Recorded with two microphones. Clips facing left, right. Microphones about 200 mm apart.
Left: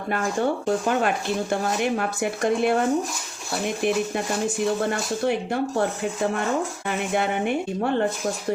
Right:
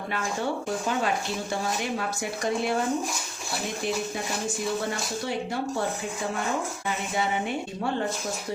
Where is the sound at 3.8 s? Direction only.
60° left (ahead or behind).